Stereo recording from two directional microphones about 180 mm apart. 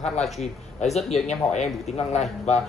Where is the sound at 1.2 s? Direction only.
40° left (ahead or behind).